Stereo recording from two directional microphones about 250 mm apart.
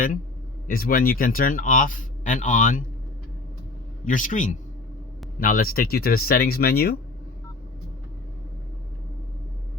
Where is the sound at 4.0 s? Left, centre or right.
Left.